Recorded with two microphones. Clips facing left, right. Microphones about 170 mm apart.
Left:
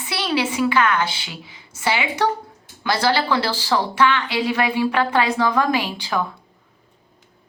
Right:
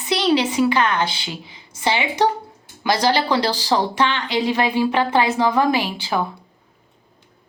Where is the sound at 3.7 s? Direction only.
35° right (ahead or behind).